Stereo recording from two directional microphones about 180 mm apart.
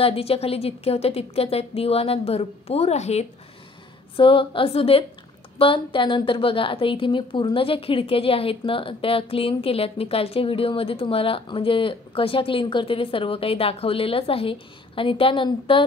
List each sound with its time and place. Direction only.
0.0 s a woman's voice: 30° left (ahead or behind)